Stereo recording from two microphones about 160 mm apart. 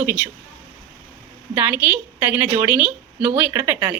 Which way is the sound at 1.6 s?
10° right (ahead or behind).